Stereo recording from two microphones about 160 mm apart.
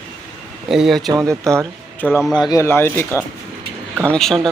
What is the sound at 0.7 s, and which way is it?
Speech, centre (ahead or behind).